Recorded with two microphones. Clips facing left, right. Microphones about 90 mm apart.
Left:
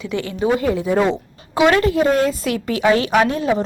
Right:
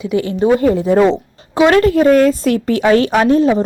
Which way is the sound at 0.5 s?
45° right (ahead or behind).